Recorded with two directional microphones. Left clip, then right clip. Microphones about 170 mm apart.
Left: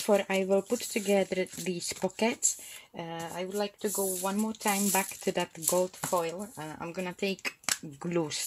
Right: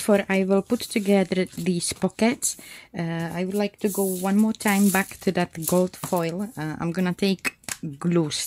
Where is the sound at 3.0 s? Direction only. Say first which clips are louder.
Right 7 dB; 60° right (ahead or behind).